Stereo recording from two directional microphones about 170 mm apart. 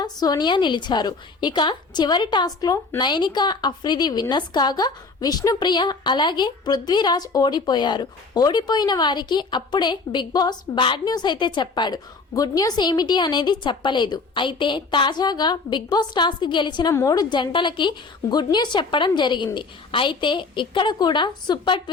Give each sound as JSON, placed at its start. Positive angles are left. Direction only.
{"t": 0.0, "sound": "a woman's voice", "side_deg": 25}